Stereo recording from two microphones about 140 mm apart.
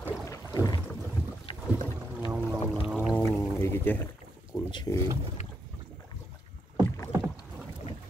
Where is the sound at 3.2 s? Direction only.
20° left (ahead or behind).